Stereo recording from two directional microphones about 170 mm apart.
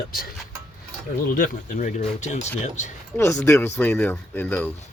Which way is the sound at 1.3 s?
55° left (ahead or behind).